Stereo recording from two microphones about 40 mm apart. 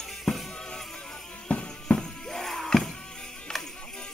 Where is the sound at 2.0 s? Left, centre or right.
Centre.